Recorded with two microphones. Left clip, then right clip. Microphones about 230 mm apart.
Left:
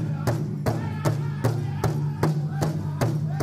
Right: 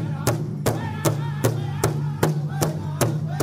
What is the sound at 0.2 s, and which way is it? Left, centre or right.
Music, right.